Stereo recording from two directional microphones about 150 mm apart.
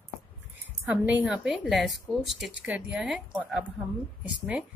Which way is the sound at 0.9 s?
10° right (ahead or behind).